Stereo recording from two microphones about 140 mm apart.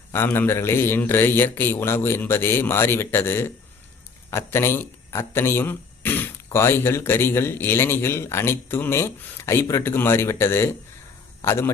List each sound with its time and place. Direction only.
0.1 s speech: 15° left (ahead or behind)